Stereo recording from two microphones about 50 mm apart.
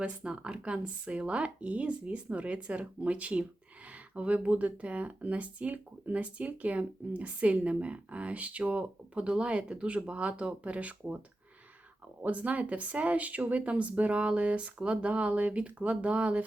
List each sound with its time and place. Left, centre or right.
0.3 s speech: right
12.2 s speech: right